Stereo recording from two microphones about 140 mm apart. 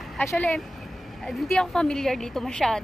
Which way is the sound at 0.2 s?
15° left (ahead or behind).